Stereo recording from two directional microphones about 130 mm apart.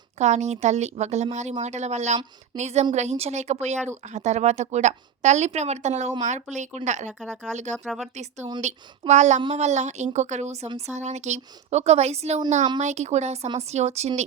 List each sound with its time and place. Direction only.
0.2 s speech: 60° right (ahead or behind)
7.1 s speech: 5° right (ahead or behind)
7.5 s speech: 65° right (ahead or behind)
7.9 s speech: 5° right (ahead or behind)
8.1 s speech: 60° right (ahead or behind)